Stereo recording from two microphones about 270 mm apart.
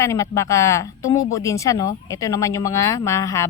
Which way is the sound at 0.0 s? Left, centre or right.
Centre.